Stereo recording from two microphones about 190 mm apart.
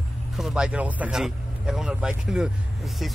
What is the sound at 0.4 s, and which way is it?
Speech, 5° right (ahead or behind).